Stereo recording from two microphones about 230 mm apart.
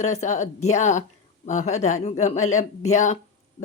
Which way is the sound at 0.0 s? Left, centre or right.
Left.